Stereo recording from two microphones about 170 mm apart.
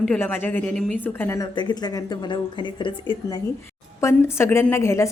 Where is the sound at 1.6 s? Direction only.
25° left (ahead or behind).